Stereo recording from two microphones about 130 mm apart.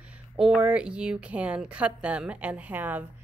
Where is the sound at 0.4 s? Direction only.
5° right (ahead or behind).